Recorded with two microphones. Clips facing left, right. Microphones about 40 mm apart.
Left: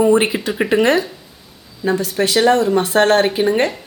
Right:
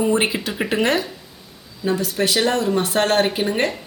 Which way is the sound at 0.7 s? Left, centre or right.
Left.